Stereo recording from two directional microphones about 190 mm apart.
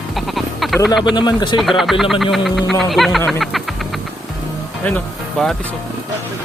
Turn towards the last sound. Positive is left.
turn(degrees=5)  # may be behind; listen again after turning